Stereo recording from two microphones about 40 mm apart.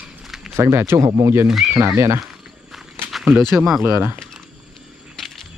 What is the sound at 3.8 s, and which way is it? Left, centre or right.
Speech, right.